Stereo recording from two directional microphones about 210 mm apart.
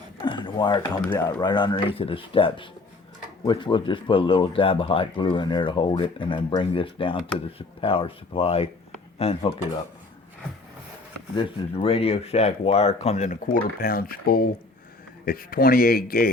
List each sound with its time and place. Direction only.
0.2 s a sound: 20° left (ahead or behind)
1.3 s speech: 20° left (ahead or behind)
11.3 s speech: 25° left (ahead or behind); by 16.3 s 45° left (ahead or behind)